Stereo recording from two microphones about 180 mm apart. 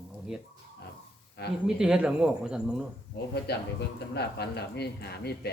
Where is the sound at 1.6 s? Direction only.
5° right (ahead or behind).